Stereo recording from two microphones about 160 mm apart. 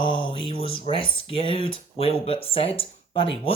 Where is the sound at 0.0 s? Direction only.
30° left (ahead or behind).